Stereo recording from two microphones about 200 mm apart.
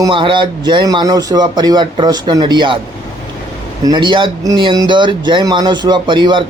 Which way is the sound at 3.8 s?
20° right (ahead or behind).